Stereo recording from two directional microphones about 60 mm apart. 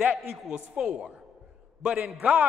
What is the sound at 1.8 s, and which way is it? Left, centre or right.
Speech, centre.